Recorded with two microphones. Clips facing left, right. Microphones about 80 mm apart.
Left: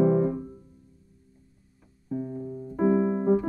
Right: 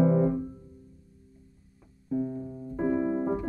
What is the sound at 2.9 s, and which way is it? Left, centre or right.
Piano, centre.